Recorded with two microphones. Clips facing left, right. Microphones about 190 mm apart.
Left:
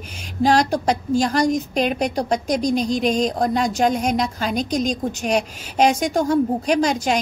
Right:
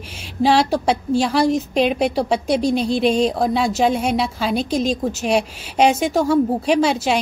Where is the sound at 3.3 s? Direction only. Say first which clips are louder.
Right 1 dB; 5° right (ahead or behind).